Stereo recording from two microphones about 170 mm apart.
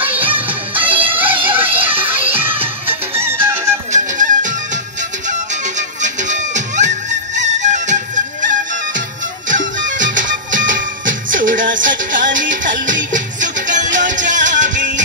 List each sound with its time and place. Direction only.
0.0 s music: 10° right (ahead or behind)
3.9 s music: 50° right (ahead or behind)
5.8 s music: 45° right (ahead or behind)
9.5 s music: 50° right (ahead or behind)